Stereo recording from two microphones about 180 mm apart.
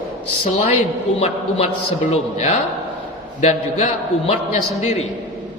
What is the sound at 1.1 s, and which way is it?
A man's voice, 35° left (ahead or behind).